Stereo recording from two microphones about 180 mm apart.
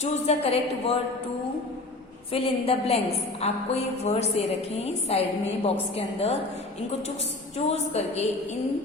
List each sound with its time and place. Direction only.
0.0 s a woman's voice: 35° left (ahead or behind)
2.3 s a woman's voice: 30° left (ahead or behind)
7.6 s a woman's voice: 35° left (ahead or behind)